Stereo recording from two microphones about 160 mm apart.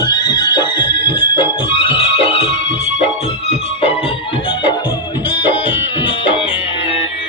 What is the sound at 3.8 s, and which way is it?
Music, 35° left (ahead or behind).